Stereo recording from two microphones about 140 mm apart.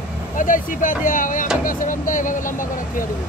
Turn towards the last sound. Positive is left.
turn(degrees=70)  # may be behind; listen again after turning